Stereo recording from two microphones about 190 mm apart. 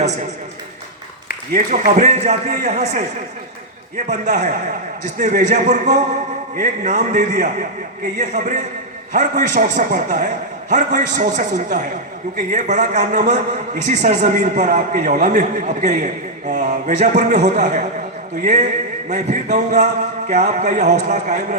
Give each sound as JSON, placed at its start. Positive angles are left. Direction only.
{"t": 1.5, "sound": "a man's voice", "side_deg": -40}
{"t": 19.0, "sound": "a man's voice", "side_deg": -40}